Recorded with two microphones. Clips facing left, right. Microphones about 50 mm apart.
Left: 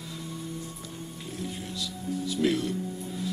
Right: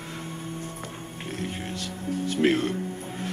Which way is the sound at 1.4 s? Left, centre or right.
Right.